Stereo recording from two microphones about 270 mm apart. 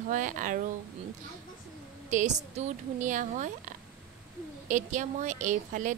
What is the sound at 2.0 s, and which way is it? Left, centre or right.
A woman's voice, right.